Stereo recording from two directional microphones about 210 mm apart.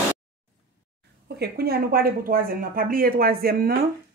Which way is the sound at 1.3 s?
50° right (ahead or behind).